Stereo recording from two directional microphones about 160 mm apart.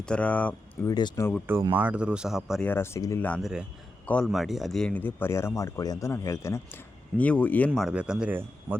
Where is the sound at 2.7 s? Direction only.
15° left (ahead or behind).